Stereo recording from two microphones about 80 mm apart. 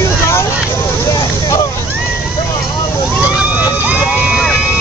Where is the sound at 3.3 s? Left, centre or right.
Centre.